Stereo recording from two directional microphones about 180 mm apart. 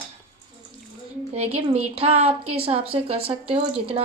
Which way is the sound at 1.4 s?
35° right (ahead or behind).